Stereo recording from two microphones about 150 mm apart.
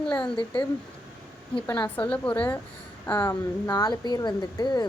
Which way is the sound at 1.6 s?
25° left (ahead or behind).